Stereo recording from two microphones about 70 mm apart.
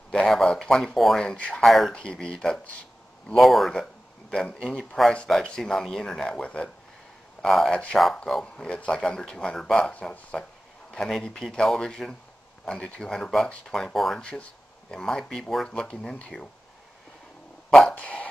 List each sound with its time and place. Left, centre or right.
0.1 s speech: centre
1.3 s speech: centre
1.6 s speech: centre
2.0 s speech: centre
5.1 s speech: centre
7.4 s speech: centre
7.7 s speech: centre
8.3 s speech: centre
8.6 s speech: centre
17.6 s a sound: centre
17.9 s a sound: left